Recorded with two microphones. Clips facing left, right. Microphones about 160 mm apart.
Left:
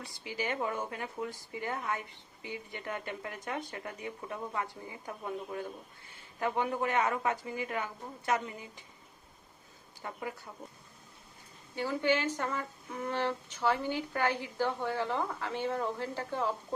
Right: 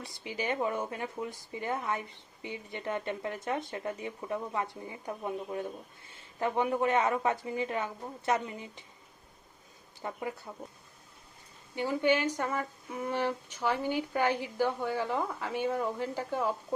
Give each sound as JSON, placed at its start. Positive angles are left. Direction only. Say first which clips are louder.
{"t": 0.0, "sound": "speech", "louder": "right 1 dB", "side_deg": -20}
{"t": 10.0, "sound": "speech", "louder": "right 3 dB", "side_deg": -25}
{"t": 11.7, "sound": "speech", "louder": "right 2 dB", "side_deg": -15}